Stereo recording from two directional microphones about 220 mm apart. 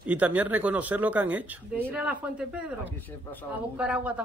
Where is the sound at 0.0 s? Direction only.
5° right (ahead or behind).